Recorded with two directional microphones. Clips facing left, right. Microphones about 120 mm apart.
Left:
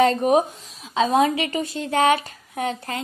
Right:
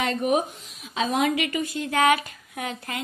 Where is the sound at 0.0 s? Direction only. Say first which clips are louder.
Left 6 dB; 35° left (ahead or behind).